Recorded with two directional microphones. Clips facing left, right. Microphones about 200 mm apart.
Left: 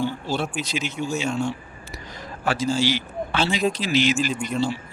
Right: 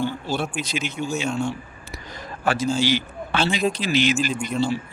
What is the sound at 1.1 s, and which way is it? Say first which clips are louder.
Speech: even; 5° left (ahead or behind).